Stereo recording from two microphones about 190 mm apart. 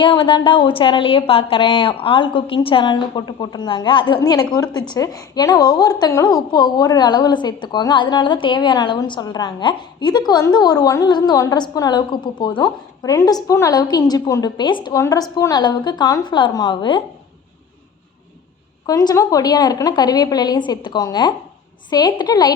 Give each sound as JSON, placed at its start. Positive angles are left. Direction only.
{"t": 0.0, "sound": "a woman's voice", "side_deg": 25}
{"t": 18.9, "sound": "a woman's voice", "side_deg": 20}